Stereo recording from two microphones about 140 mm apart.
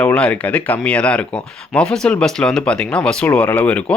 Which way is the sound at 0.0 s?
10° left (ahead or behind).